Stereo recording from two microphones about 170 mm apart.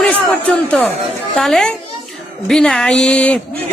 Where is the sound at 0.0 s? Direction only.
5° left (ahead or behind).